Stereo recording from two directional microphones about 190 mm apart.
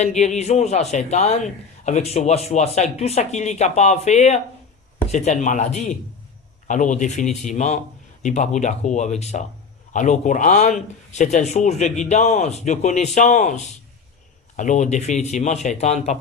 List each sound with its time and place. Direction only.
0.2 s speech: 35° left (ahead or behind)